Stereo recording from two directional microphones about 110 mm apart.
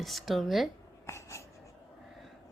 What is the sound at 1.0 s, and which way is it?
Writing, 25° left (ahead or behind).